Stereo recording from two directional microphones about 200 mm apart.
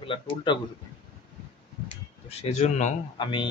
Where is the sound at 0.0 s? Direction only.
25° left (ahead or behind).